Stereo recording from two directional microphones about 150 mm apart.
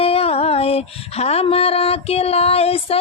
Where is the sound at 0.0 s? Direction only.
40° left (ahead or behind).